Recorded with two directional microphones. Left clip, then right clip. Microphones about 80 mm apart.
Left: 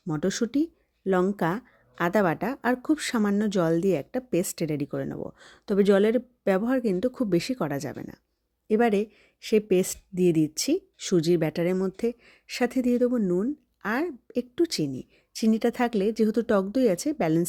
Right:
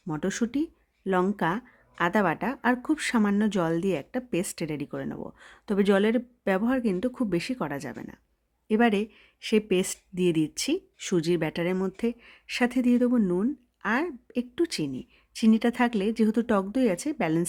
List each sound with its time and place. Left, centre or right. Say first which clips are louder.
0.2 s speech: left 3 dB; left
3.2 s speech: even; centre
3.4 s speech: left 3 dB; left
8.6 s speech: left 1 dB; left
11.7 s speech: left 2 dB; centre
11.9 s speech: left 2 dB; left
13.1 s speech: even; centre
13.8 s speech: right 1 dB; left